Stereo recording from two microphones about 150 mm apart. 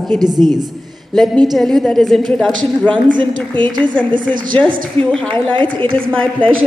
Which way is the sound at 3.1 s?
30° right (ahead or behind).